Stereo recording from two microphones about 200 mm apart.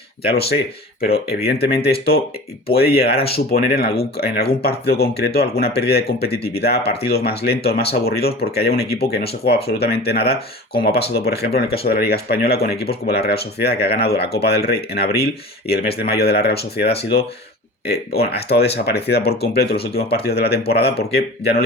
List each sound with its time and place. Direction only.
0.3 s speech: 50° left (ahead or behind)